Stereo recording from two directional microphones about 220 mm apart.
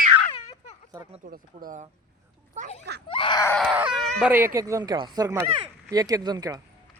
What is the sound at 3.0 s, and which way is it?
Screaming, 25° left (ahead or behind).